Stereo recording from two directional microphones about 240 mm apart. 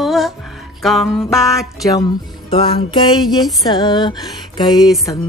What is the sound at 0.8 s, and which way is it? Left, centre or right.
Speech, centre.